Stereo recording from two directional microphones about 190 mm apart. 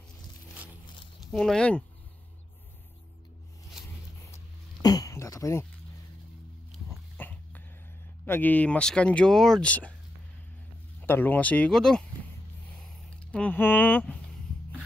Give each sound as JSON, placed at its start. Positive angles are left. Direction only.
{"t": 1.3, "sound": "speech", "side_deg": 0}
{"t": 4.8, "sound": "a sound", "side_deg": 20}
{"t": 7.2, "sound": "dog", "side_deg": 10}
{"t": 8.3, "sound": "speech", "side_deg": 10}
{"t": 11.0, "sound": "speech", "side_deg": 10}
{"t": 12.7, "sound": "a sound", "side_deg": 5}